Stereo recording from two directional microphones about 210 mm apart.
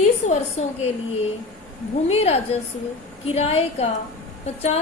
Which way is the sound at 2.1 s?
30° left (ahead or behind).